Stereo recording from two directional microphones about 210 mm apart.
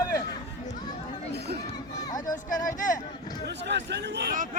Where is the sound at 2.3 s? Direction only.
40° left (ahead or behind).